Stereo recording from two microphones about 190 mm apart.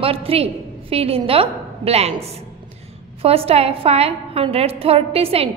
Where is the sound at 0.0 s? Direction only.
30° right (ahead or behind).